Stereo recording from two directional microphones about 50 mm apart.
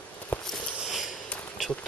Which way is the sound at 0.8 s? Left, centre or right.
Centre.